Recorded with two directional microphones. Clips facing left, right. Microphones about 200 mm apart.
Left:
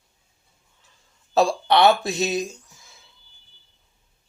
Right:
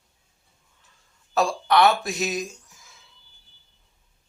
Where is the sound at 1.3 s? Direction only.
25° left (ahead or behind).